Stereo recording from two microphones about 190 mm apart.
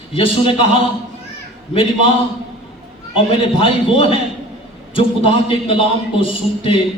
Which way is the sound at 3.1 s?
30° left (ahead or behind).